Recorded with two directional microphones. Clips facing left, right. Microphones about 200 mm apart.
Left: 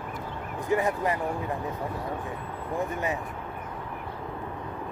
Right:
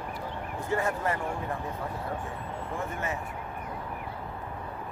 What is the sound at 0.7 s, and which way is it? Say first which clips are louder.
Speech: left 3 dB; 15° left (ahead or behind).